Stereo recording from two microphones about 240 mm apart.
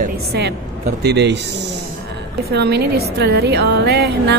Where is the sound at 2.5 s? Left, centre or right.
Right.